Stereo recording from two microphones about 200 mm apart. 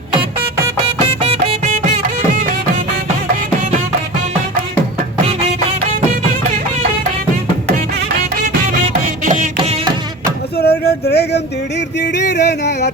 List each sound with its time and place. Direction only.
0.9 s music: 30° right (ahead or behind)
8.7 s music: 40° right (ahead or behind)
10.6 s a sound: 50° left (ahead or behind)
11.9 s music: 60° left (ahead or behind)